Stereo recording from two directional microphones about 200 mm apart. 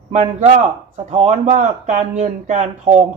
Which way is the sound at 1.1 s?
35° right (ahead or behind).